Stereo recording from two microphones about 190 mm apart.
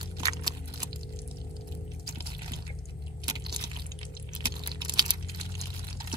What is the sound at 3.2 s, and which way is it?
Crunch, 20° right (ahead or behind).